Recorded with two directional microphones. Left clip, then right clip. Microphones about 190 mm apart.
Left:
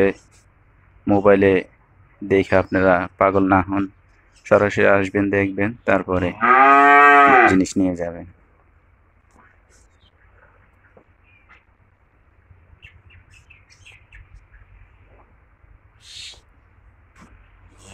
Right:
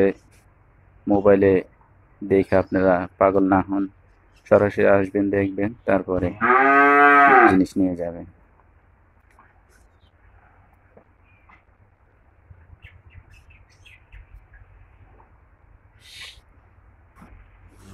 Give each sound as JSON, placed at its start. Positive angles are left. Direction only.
{"t": 1.0, "sound": "speech", "side_deg": 0}
{"t": 6.7, "sound": "moo", "side_deg": 40}
{"t": 7.4, "sound": "speech", "side_deg": 0}